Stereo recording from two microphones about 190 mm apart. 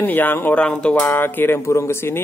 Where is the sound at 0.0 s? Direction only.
10° left (ahead or behind).